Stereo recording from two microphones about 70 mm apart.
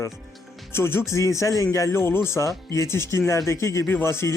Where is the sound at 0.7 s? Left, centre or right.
Left.